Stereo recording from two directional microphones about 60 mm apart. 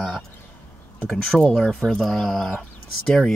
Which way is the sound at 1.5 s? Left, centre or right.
Centre.